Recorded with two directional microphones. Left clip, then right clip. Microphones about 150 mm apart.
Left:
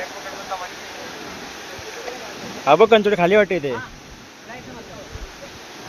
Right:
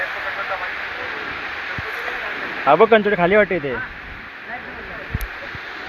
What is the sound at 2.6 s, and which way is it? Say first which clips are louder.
Speech: even; 25° left (ahead or behind).